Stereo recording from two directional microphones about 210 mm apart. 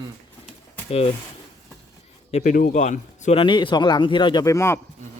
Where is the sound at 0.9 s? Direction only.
25° left (ahead or behind).